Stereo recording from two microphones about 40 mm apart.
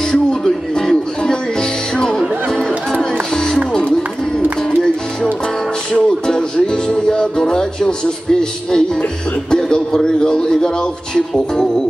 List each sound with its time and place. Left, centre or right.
0.7 s music: centre
5.9 s music: centre
9.5 s a sound: centre
11.1 s music: centre